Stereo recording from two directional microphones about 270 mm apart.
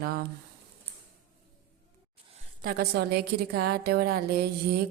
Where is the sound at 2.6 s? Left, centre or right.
Right.